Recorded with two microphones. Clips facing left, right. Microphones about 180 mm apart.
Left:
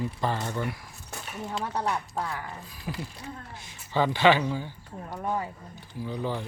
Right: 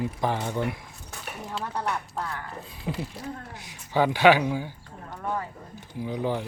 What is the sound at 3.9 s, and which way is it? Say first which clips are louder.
Speech: right 3 dB; 10° right (ahead or behind).